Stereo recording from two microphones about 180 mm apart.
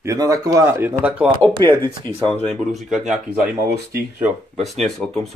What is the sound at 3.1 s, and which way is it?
A man's voice, 10° right (ahead or behind).